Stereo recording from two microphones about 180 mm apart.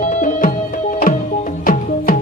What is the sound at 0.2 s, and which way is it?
Music, 45° left (ahead or behind).